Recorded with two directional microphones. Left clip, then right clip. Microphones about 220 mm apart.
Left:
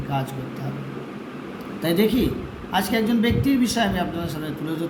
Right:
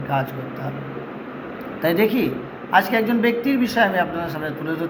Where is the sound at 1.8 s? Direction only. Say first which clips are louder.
Right 2 dB; 15° left (ahead or behind).